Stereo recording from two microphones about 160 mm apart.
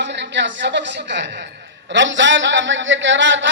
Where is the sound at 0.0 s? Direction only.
90° right.